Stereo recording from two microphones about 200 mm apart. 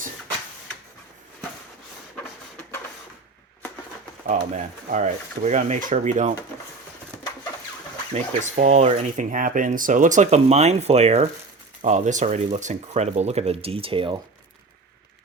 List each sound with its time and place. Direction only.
2.1 s a sound: 10° left (ahead or behind)
4.3 s speech: 40° right (ahead or behind)
8.1 s speech: 35° right (ahead or behind)